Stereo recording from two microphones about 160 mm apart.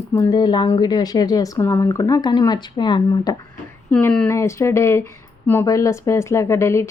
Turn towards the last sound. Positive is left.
turn(degrees=15)  # may be behind; listen again after turning